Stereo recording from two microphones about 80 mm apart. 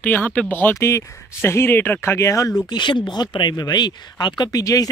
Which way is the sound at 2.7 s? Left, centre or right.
Left.